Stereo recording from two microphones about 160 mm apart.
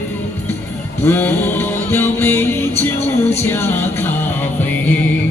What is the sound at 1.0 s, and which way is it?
Music, 15° left (ahead or behind).